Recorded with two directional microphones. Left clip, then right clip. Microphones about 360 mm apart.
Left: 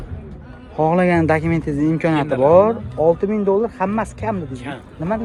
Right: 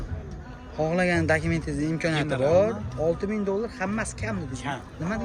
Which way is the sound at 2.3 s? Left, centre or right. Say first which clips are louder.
Left 9 dB; left.